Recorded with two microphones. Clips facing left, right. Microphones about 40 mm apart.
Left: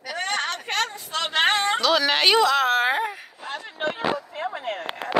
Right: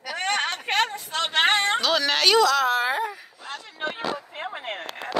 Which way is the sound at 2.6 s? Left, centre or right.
Left.